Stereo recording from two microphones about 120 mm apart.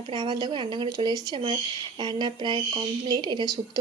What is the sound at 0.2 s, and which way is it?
A woman's voice, 35° right (ahead or behind).